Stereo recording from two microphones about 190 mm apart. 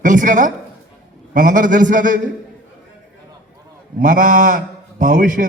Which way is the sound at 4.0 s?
45° right (ahead or behind).